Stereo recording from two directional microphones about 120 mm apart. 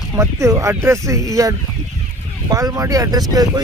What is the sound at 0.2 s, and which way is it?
Speech, 25° right (ahead or behind).